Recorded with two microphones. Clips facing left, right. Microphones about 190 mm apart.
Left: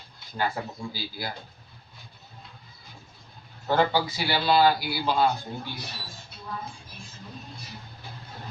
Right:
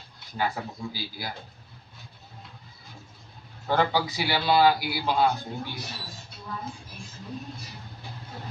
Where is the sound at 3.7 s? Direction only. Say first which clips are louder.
Left 1 dB; 15° right (ahead or behind).